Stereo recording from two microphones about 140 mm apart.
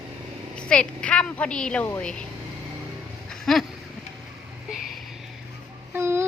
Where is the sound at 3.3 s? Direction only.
5° left (ahead or behind).